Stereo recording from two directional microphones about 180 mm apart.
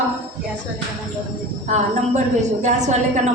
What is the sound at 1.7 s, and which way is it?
A woman's voice, 40° right (ahead or behind).